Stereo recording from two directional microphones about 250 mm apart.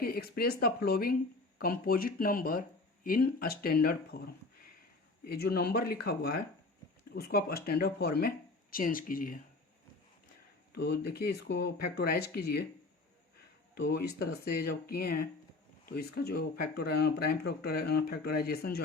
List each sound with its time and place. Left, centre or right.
0.0 s speech: left
5.2 s speech: left
10.8 s speech: left
13.7 s speech: left